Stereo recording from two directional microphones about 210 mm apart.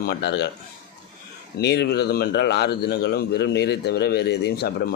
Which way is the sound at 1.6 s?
50° left (ahead or behind).